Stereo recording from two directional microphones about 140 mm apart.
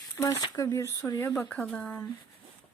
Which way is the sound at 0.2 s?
25° left (ahead or behind).